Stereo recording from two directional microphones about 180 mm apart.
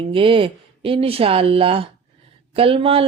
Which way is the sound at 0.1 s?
30° right (ahead or behind).